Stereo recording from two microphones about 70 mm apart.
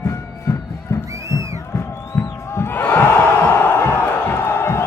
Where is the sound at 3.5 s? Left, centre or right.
Left.